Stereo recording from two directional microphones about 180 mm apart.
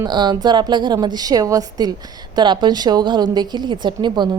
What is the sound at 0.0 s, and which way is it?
A woman's voice, 25° right (ahead or behind).